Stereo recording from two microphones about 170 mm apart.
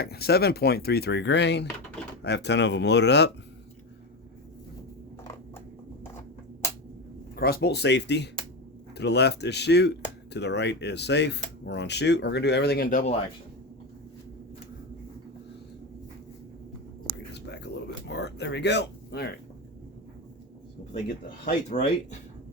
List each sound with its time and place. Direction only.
0.0 s speech: 70° left (ahead or behind); by 3.3 s 90° left
7.3 s speech: 65° left (ahead or behind)
17.3 s whispering: 85° left
18.1 s speech: 80° left
21.7 s speech: 45° left (ahead or behind)